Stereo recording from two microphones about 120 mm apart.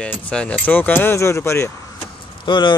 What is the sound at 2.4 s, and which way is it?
Speech, 40° left (ahead or behind).